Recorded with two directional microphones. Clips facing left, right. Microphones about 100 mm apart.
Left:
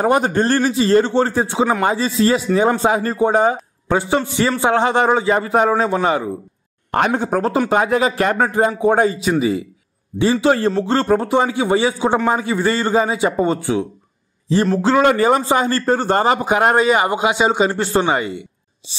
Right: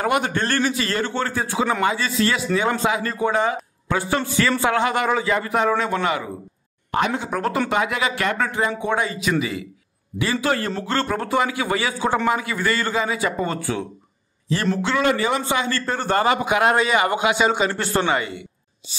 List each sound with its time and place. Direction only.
0.0 s a man's voice: 35° left (ahead or behind)
6.9 s a man's voice: 50° left (ahead or behind)
9.1 s a man's voice: 30° left (ahead or behind)
14.8 s a man's voice: 35° left (ahead or behind)